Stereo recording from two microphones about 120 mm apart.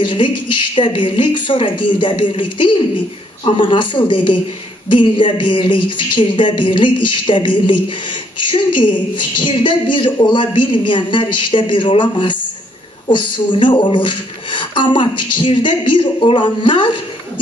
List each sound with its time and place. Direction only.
0.0 s a woman's voice: 40° left (ahead or behind)